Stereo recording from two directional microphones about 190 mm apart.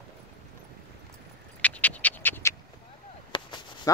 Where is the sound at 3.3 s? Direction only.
25° left (ahead or behind).